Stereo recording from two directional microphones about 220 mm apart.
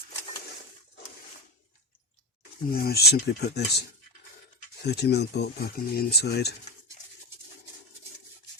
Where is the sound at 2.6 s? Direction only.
45° left (ahead or behind).